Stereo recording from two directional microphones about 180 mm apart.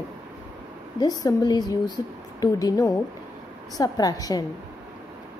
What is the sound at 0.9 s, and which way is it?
Speech, 25° left (ahead or behind).